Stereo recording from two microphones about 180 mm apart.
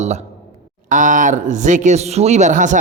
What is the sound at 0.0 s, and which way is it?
A man's voice, 40° right (ahead or behind).